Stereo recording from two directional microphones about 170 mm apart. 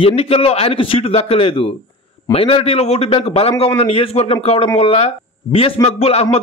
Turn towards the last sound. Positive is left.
turn(degrees=35)  # may be behind; listen again after turning